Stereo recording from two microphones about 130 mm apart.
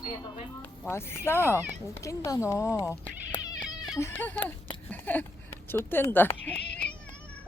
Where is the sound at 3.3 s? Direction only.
35° left (ahead or behind).